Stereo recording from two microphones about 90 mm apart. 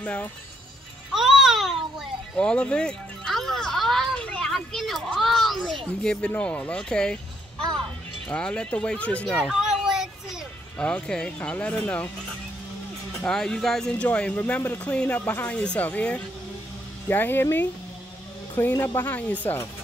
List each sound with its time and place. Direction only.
0.0 s speech: 15° left (ahead or behind)
1.1 s babbling: 5° right (ahead or behind)
2.3 s a sound: 10° left (ahead or behind)
4.2 s children playing: 10° left (ahead or behind)
6.3 s speech: 15° left (ahead or behind)
8.3 s speech: 10° left (ahead or behind)
9.4 s children playing: 5° right (ahead or behind)
10.8 s speech: 10° left (ahead or behind)
13.3 s speech: 5° left (ahead or behind)